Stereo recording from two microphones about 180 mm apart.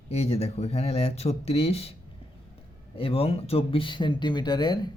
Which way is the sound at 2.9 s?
30° left (ahead or behind).